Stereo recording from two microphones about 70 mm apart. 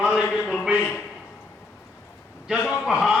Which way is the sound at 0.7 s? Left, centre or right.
Left.